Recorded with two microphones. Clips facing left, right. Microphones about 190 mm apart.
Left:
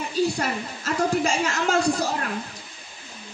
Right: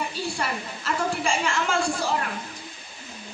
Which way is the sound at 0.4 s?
40° left (ahead or behind).